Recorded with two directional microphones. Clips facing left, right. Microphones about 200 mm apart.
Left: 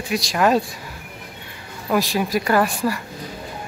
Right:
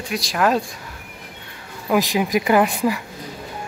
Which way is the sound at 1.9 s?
15° right (ahead or behind).